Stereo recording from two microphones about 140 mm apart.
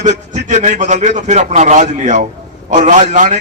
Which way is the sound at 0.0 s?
55° right (ahead or behind).